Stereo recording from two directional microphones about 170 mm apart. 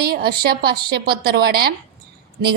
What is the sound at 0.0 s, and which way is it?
A woman's voice, 65° right (ahead or behind).